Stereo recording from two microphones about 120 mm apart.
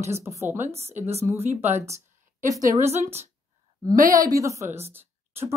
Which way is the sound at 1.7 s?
25° right (ahead or behind).